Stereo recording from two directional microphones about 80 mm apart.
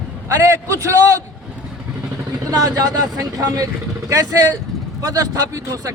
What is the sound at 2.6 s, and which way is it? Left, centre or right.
Speech, right.